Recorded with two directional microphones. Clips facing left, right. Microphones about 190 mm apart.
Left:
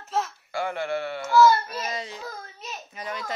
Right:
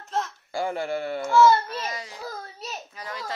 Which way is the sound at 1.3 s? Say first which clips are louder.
Even; 25° right (ahead or behind).